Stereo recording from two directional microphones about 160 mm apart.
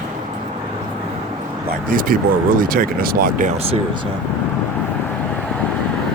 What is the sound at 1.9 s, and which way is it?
Speech, 60° right (ahead or behind).